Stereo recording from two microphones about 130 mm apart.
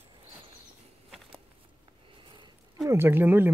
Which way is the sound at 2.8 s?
20° right (ahead or behind).